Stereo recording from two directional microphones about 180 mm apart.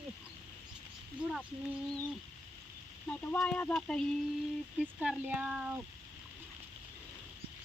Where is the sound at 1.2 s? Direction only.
5° right (ahead or behind).